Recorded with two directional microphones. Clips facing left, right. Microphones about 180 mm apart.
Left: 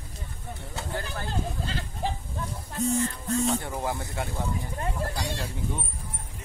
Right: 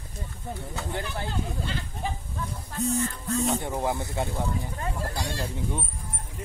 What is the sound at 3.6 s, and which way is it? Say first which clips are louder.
Speech: right 3 dB; 20° right (ahead or behind).